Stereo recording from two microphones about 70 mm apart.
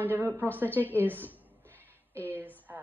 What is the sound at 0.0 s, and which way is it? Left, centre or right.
A woman's voice, right.